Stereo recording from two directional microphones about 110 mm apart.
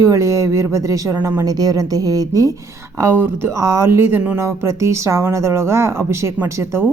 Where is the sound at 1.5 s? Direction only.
35° right (ahead or behind).